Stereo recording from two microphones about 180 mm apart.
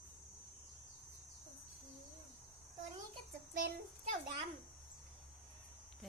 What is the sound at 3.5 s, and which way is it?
Speech, 50° right (ahead or behind).